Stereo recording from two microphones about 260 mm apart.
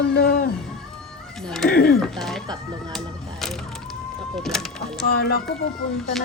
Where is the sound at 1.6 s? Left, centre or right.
Left.